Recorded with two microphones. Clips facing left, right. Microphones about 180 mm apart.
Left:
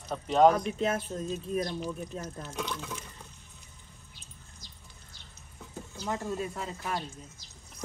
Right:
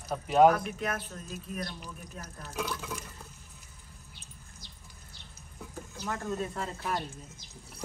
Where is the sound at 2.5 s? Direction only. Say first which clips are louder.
Right 3 dB; 5° right (ahead or behind).